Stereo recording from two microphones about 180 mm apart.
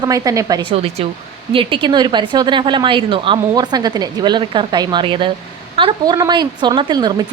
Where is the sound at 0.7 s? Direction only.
35° right (ahead or behind).